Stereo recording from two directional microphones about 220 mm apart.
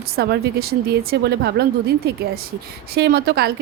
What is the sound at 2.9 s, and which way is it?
Speech, 45° right (ahead or behind).